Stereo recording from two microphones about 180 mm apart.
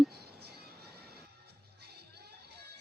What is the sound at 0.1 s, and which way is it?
Music, 60° right (ahead or behind).